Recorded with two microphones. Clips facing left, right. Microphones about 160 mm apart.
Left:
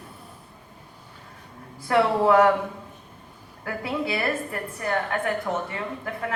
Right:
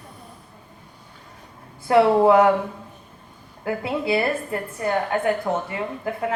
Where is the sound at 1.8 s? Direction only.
30° right (ahead or behind).